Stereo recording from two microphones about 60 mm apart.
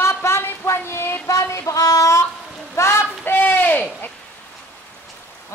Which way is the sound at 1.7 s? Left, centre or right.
Left.